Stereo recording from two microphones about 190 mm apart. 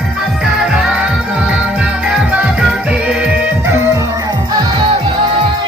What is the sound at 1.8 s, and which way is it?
Music, 5° right (ahead or behind).